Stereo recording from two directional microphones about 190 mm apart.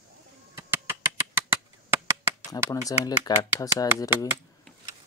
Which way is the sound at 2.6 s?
20° left (ahead or behind).